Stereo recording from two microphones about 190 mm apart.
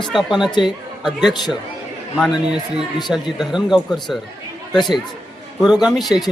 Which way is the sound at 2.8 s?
25° left (ahead or behind).